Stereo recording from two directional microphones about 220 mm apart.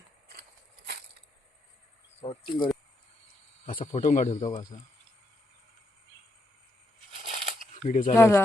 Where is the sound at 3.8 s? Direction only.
35° left (ahead or behind).